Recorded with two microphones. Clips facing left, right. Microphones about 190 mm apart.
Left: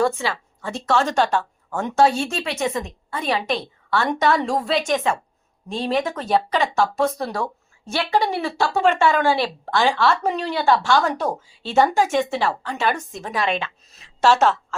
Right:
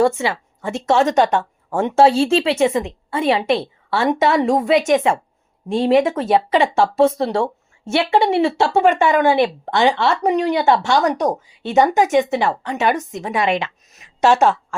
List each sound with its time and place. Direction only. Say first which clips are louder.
0.0 s speech: right 4 dB; 25° right (ahead or behind)
14.2 s a woman's voice: right 3 dB; 15° right (ahead or behind)